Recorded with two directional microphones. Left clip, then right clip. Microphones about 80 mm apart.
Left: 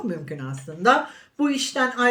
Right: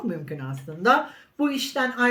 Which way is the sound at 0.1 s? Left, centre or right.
Left.